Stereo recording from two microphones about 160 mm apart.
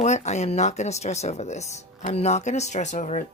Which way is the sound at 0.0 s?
45° left (ahead or behind).